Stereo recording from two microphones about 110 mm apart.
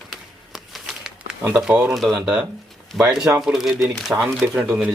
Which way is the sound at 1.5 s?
5° right (ahead or behind).